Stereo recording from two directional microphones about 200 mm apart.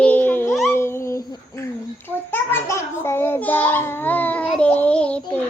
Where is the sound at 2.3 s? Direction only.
15° left (ahead or behind).